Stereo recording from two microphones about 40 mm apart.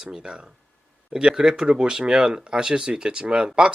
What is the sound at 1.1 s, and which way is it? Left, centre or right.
Speech, centre.